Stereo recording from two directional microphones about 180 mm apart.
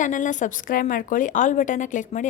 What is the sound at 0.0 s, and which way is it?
A woman's voice, 45° left (ahead or behind).